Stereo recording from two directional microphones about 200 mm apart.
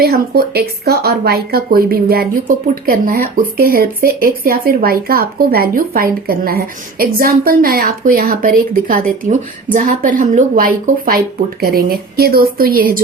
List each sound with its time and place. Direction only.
0.0 s speech: 50° right (ahead or behind)